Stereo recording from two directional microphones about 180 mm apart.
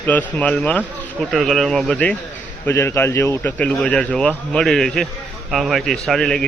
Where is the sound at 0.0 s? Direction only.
10° left (ahead or behind).